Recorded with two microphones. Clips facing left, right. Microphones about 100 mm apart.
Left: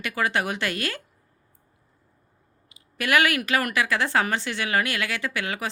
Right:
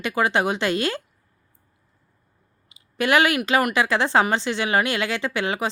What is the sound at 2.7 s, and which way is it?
Speech, 25° right (ahead or behind).